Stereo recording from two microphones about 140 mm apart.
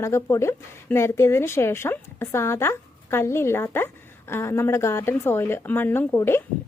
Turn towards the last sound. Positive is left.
turn(degrees=15)  # may be behind; listen again after turning